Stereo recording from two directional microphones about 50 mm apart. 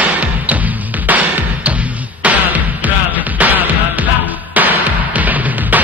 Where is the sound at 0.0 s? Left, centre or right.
Right.